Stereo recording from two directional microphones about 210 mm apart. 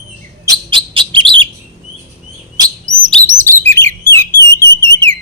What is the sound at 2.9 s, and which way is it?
Chirp, 35° right (ahead or behind).